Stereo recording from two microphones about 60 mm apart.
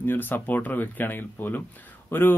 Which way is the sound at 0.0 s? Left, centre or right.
Left.